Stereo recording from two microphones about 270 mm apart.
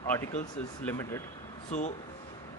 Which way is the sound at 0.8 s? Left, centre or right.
Centre.